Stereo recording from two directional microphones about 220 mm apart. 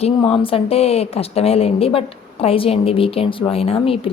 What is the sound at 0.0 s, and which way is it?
Speech, 25° left (ahead or behind).